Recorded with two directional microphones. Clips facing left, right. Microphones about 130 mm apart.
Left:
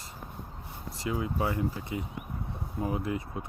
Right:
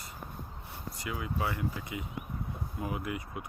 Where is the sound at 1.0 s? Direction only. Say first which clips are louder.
Left 5 dB; 30° left (ahead or behind).